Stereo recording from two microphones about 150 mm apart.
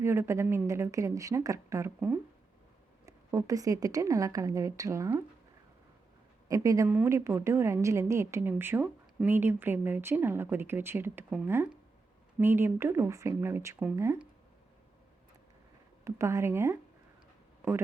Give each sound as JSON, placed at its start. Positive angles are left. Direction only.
{"t": 0.0, "sound": "a woman's voice", "side_deg": -15}
{"t": 3.1, "sound": "a woman's voice", "side_deg": -20}
{"t": 6.5, "sound": "a woman's voice", "side_deg": -20}
{"t": 16.0, "sound": "a woman's voice", "side_deg": -20}